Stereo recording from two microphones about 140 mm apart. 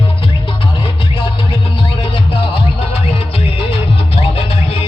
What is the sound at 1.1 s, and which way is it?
Music, 40° left (ahead or behind).